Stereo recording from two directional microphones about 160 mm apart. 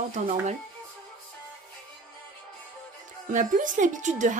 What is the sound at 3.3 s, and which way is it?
Speech, 55° right (ahead or behind).